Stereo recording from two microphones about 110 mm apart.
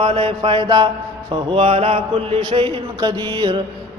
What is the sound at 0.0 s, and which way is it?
Mantra, 60° right (ahead or behind).